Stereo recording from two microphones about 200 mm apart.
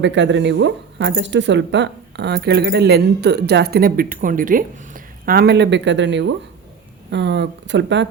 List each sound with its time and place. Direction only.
0.0 s speech: 65° right (ahead or behind)